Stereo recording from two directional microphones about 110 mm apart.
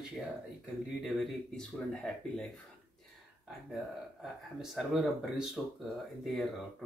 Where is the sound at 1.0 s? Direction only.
Centre (ahead or behind).